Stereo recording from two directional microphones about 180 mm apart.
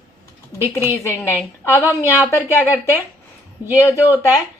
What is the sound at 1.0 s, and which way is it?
A woman's voice, 15° left (ahead or behind).